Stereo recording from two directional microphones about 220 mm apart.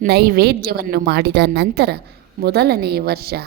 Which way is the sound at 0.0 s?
45° right (ahead or behind).